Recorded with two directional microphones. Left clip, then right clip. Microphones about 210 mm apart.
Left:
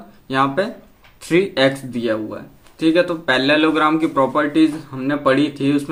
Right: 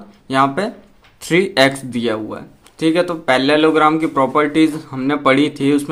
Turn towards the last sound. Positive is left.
turn(degrees=-35)  # may be behind; listen again after turning